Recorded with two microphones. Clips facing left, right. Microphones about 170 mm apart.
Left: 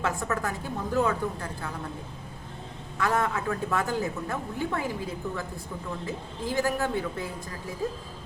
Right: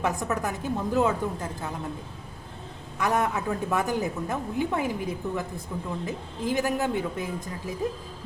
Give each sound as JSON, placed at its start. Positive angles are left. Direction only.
{"t": 0.0, "sound": "a woman's voice", "side_deg": -15}
{"t": 3.0, "sound": "a woman's voice", "side_deg": -15}